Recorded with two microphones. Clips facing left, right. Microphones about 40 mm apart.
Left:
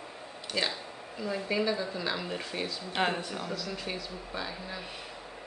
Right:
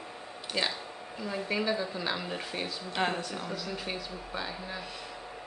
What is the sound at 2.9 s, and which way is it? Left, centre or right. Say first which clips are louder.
Speech: left 1 dB; centre.